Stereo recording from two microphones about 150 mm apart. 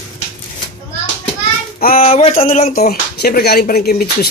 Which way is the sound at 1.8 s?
70° left (ahead or behind).